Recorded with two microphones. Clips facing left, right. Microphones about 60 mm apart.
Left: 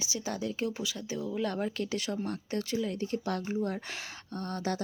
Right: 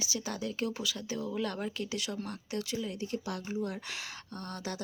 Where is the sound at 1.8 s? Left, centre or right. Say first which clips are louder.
Left 3 dB; left.